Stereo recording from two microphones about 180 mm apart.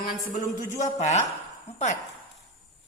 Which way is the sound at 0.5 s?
40° left (ahead or behind).